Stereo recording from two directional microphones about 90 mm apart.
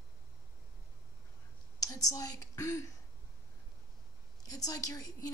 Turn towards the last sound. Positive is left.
turn(degrees=45)  # may be behind; listen again after turning